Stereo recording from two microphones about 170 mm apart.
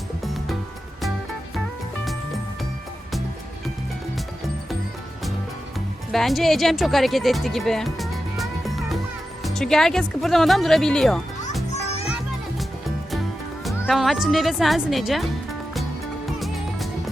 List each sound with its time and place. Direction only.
0.2 s music: centre (ahead or behind)
6.1 s speech: centre (ahead or behind)
11.7 s children playing: 40° left (ahead or behind)
13.7 s speech: centre (ahead or behind)